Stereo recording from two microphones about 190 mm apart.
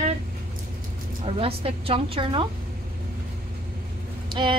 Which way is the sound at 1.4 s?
30° right (ahead or behind).